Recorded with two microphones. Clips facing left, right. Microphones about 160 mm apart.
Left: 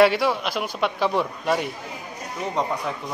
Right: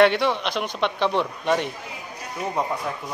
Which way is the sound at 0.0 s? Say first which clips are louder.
Even; 5° left (ahead or behind).